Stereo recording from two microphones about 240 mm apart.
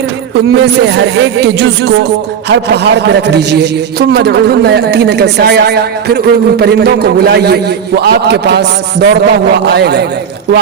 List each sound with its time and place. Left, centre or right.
0.6 s speech: right